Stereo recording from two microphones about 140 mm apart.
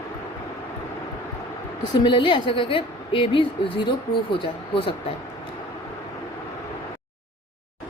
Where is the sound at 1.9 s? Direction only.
35° left (ahead or behind).